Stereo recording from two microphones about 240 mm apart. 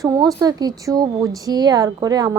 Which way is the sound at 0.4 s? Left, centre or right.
Centre.